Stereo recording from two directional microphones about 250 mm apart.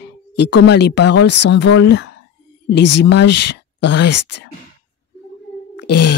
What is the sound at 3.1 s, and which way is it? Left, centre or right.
Speech, left.